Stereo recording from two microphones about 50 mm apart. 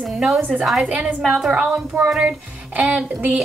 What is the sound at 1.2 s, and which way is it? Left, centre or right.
A woman's voice, centre.